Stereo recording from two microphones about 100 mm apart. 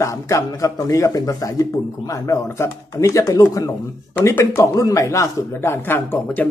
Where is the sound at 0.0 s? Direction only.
35° left (ahead or behind).